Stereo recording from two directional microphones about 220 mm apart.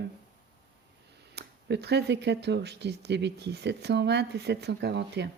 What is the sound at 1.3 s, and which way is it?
Speech, 50° right (ahead or behind).